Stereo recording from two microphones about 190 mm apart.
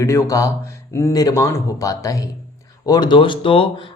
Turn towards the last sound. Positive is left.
turn(degrees=25)  # may be behind; listen again after turning